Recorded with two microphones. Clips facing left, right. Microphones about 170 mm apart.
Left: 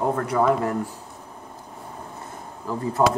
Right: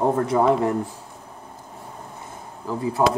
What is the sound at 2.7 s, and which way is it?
Speech, 10° right (ahead or behind).